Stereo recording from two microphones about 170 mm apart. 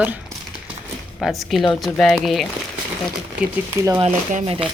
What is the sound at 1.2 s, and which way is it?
Speech, centre (ahead or behind).